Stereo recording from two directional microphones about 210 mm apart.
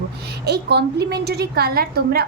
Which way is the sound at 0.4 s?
50° right (ahead or behind).